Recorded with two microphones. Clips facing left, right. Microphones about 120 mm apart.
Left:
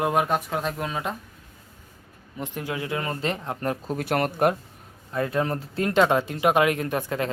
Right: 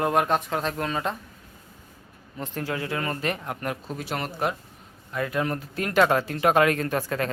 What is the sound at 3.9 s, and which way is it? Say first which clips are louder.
Speech: left 6 dB; 55° left (ahead or behind).